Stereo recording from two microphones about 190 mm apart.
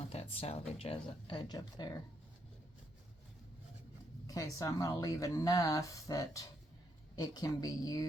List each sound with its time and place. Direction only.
0.1 s speech: 30° left (ahead or behind)
4.3 s a woman's voice: 15° left (ahead or behind)